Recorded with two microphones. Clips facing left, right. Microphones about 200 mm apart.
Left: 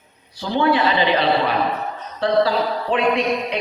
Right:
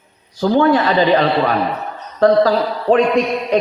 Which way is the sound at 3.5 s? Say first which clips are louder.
Right 9 dB; 45° right (ahead or behind).